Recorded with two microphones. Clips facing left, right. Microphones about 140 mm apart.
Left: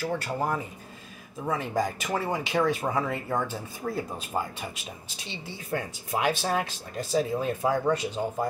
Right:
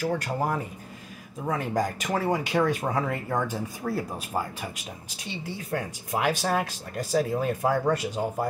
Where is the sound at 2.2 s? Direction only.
10° right (ahead or behind).